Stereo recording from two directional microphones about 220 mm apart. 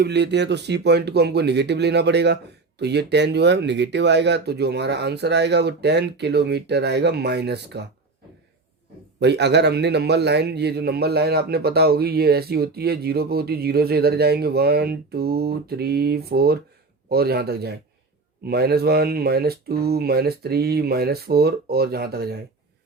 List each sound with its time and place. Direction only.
0.0 s speech: 50° right (ahead or behind)
9.2 s speech: 50° right (ahead or behind)